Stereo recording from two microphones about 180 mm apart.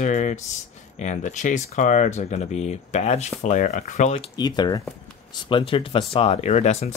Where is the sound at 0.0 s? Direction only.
40° left (ahead or behind).